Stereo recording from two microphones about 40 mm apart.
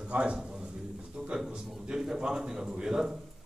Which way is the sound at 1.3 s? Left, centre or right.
Centre.